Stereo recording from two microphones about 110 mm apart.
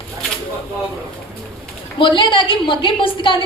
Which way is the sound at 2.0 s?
45° left (ahead or behind).